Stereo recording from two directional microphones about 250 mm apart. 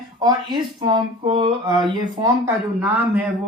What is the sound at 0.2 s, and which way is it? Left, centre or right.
Speech, centre.